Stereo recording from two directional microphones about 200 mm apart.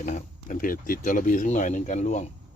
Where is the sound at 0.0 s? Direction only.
40° left (ahead or behind).